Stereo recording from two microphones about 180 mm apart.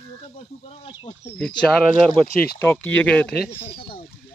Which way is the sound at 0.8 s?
30° left (ahead or behind).